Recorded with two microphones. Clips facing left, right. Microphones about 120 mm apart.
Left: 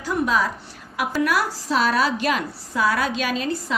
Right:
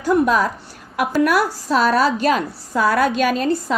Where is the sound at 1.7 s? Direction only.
40° right (ahead or behind).